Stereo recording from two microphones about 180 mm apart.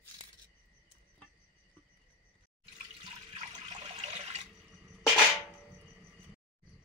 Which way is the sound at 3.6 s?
25° right (ahead or behind).